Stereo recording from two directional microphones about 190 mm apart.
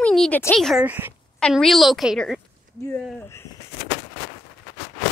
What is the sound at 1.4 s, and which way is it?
A woman's voice, 5° left (ahead or behind).